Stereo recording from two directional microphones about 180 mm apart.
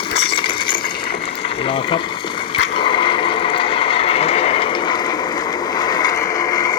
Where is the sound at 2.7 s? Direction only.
30° left (ahead or behind).